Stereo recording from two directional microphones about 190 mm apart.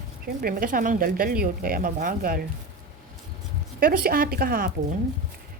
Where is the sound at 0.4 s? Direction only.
45° right (ahead or behind).